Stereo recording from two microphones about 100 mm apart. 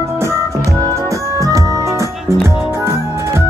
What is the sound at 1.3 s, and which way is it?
Music, 35° right (ahead or behind).